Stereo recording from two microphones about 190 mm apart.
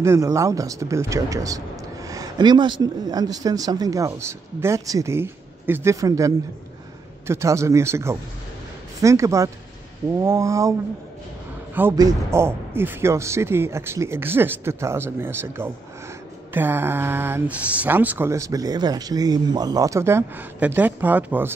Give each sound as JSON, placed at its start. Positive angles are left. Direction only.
{"t": 0.0, "sound": "speech", "side_deg": -15}
{"t": 11.7, "sound": "speech", "side_deg": -15}